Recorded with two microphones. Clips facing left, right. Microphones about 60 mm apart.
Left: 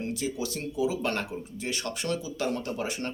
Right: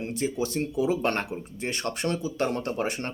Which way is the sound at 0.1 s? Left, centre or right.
Right.